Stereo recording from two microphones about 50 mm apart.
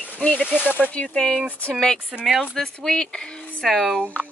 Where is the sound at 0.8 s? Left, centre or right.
Left.